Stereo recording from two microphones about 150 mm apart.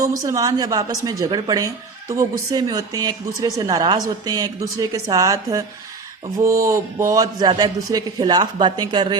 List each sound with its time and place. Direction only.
0.0 s a woman's voice: 20° right (ahead or behind)